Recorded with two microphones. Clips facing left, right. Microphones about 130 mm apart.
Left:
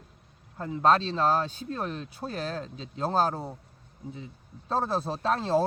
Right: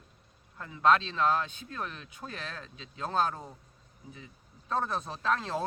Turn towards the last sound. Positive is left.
turn(degrees=30)  # may be behind; listen again after turning